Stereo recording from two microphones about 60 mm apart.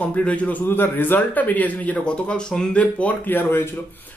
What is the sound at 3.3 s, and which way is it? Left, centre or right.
Speech, left.